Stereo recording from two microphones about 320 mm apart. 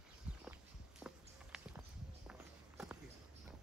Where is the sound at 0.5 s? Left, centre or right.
Centre.